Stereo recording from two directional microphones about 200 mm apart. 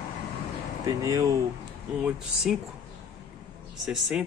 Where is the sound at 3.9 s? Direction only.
Centre (ahead or behind).